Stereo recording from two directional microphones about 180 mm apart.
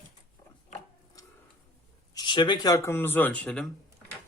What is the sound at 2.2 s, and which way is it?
Speech, 25° left (ahead or behind).